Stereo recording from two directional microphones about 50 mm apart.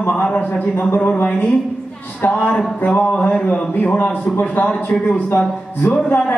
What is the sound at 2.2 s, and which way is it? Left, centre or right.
Speech, left.